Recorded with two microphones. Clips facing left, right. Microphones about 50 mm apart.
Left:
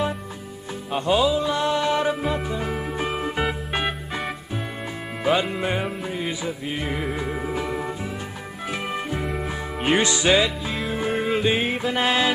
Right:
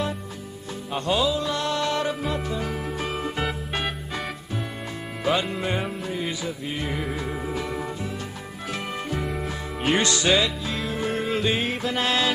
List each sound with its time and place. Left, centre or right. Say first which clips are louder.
0.9 s music: left 3 dB; centre
5.2 s music: left 3 dB; centre
9.1 s music: left 1 dB; centre